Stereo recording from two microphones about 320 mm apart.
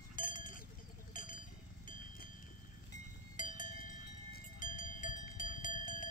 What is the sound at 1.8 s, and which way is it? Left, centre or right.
Music, left.